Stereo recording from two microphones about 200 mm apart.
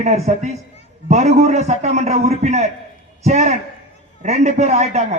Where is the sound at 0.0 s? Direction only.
35° right (ahead or behind).